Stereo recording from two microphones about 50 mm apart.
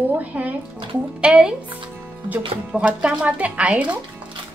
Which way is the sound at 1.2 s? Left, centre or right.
Centre.